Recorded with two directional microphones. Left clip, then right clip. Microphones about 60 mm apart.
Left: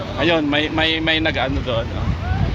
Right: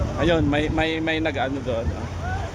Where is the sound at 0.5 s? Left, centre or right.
Right.